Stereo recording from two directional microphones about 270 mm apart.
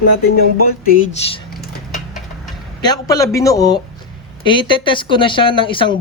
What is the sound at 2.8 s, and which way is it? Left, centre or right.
Speech, centre.